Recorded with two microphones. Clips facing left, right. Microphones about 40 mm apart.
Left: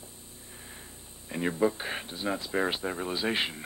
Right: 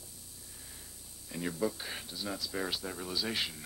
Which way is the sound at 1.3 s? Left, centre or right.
Left.